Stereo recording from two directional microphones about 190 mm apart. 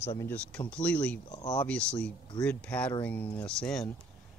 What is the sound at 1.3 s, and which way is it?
Speech, 20° left (ahead or behind).